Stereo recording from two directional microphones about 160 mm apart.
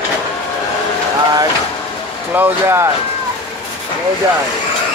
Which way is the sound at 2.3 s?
15° right (ahead or behind).